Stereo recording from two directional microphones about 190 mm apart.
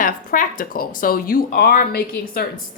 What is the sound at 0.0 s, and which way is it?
A woman's voice, 45° left (ahead or behind).